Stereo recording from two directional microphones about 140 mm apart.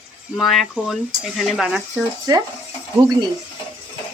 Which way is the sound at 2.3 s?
25° right (ahead or behind).